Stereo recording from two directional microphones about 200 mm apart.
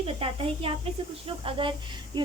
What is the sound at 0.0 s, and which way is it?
Speech, 30° right (ahead or behind).